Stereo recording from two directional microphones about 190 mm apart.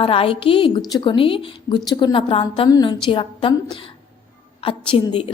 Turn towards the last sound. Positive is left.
turn(degrees=25)  # may be behind; listen again after turning